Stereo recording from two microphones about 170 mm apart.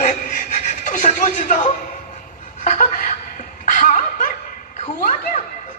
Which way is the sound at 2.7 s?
50° left (ahead or behind).